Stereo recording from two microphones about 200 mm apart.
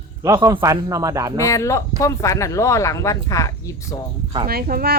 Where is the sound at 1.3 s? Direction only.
15° left (ahead or behind).